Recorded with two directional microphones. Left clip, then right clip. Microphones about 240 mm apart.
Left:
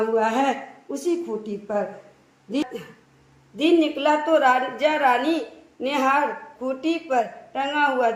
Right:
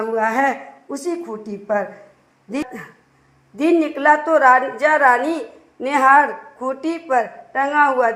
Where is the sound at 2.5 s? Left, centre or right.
Right.